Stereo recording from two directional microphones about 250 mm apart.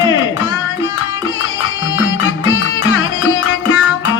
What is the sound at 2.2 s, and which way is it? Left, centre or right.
Music, left.